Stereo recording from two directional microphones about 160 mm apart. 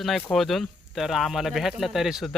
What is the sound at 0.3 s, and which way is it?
Speech, centre (ahead or behind).